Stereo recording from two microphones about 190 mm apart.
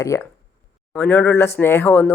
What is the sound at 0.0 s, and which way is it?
Speech, 15° left (ahead or behind).